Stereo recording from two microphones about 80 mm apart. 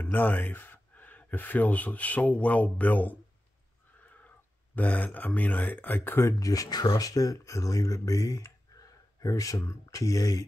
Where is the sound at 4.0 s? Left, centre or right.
Left.